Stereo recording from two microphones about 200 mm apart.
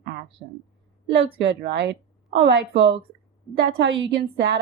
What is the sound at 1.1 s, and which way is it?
A woman's voice, 65° right (ahead or behind).